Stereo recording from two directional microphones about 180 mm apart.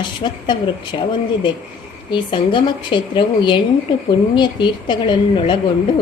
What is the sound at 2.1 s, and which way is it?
Speech, 25° left (ahead or behind).